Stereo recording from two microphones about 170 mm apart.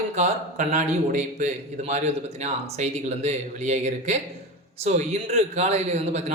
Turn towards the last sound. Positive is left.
turn(degrees=-40)  # may be behind; listen again after turning